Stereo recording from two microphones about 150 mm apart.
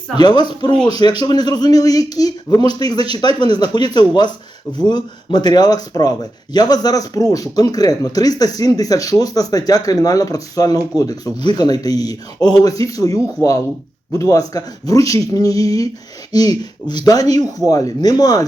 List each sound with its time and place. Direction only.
0.2 s speech: 30° left (ahead or behind)